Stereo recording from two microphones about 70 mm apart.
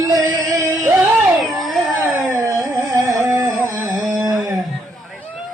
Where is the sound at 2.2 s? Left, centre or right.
Right.